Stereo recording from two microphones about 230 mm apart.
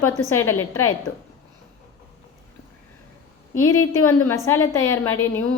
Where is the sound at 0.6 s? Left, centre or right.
Left.